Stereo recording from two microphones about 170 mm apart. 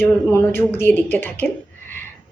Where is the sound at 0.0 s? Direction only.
15° left (ahead or behind).